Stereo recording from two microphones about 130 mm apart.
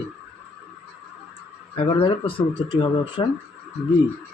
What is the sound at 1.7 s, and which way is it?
Speech, 45° left (ahead or behind).